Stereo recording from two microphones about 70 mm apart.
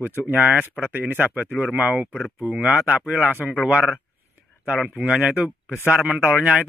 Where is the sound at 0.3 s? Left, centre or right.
Right.